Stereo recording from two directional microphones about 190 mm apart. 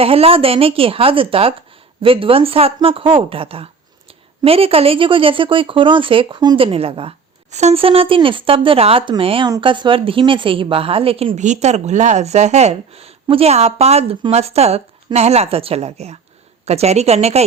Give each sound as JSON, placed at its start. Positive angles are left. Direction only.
{"t": 0.0, "sound": "a woman's voice", "side_deg": -30}